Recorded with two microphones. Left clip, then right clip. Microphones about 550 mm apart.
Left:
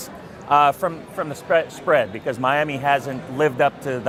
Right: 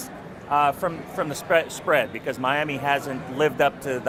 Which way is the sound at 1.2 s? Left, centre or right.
Left.